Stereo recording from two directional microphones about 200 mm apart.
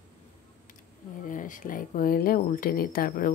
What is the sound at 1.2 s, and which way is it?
Speech, 40° left (ahead or behind).